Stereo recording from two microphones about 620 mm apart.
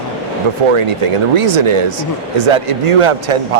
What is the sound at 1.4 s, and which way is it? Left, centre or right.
A man's voice, right.